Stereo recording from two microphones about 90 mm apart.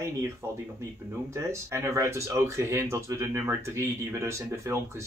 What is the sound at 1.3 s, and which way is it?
Speech, 30° right (ahead or behind).